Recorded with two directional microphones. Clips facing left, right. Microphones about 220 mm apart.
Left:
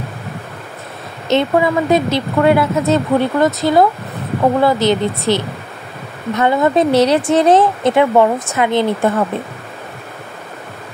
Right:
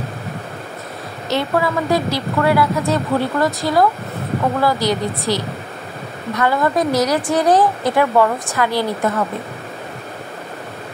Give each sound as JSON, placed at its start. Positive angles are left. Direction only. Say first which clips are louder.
{"t": 1.3, "sound": "speech", "louder": "left 5 dB", "side_deg": 20}